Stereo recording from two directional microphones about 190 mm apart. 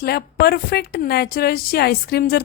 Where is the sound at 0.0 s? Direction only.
55° left (ahead or behind).